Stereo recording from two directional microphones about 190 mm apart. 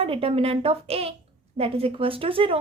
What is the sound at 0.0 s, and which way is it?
A woman's voice, 30° right (ahead or behind).